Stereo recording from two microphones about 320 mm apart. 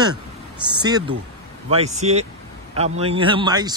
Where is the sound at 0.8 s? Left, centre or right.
Centre.